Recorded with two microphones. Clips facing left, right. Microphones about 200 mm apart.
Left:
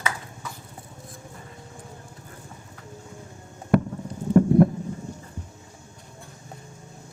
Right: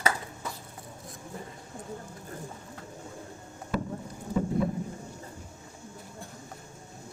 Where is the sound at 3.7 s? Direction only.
60° left (ahead or behind).